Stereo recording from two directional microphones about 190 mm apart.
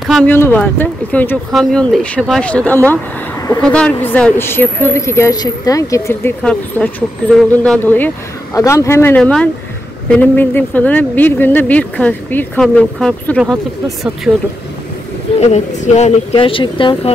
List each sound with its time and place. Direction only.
0.1 s a woman's voice: 10° left (ahead or behind)
14.3 s speech: 10° right (ahead or behind)
15.4 s speech: 35° left (ahead or behind)